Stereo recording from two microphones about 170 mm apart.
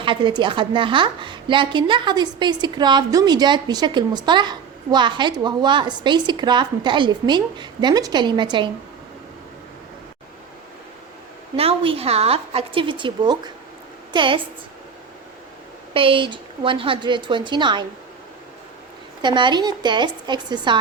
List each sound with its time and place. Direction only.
0.0 s a woman's voice: 30° right (ahead or behind)
11.5 s a woman's voice: 35° right (ahead or behind)
15.9 s a woman's voice: 30° right (ahead or behind)
19.2 s a woman's voice: 25° right (ahead or behind)